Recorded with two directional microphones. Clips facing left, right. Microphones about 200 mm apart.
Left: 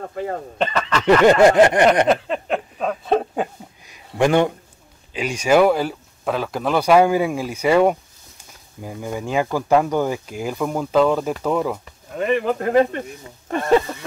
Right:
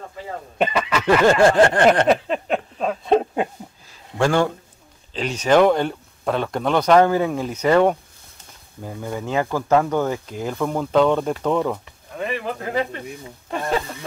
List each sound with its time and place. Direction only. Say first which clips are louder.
0.1 s speech: left 8 dB; 55° left (ahead or behind)
0.6 s speech: right 2 dB; 10° right (ahead or behind)
1.2 s speech: left 2 dB; 20° left (ahead or behind)
2.0 s a sound: even; centre (ahead or behind)
3.8 s a sound: left 2 dB; 15° left (ahead or behind)
5.1 s speech: even; 10° left (ahead or behind)
11.8 s speech: left 4 dB; 50° left (ahead or behind)